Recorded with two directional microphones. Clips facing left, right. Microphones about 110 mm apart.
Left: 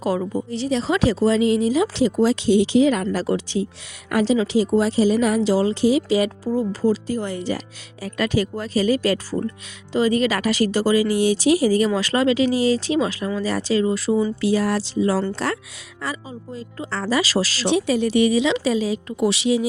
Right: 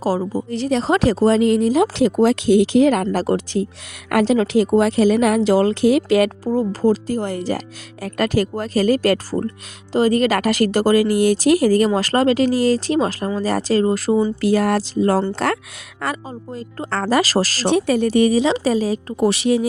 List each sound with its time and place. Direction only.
0.0 s a woman's voice: 35° right (ahead or behind)
0.5 s speech: 45° right (ahead or behind)
4.1 s a woman's voice: 60° right (ahead or behind)
6.4 s a woman's voice: 45° right (ahead or behind)